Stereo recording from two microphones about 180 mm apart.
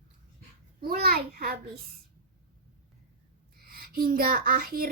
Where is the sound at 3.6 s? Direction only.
55° right (ahead or behind).